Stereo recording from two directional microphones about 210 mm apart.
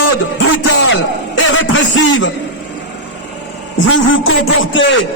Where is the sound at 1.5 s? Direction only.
65° left (ahead or behind).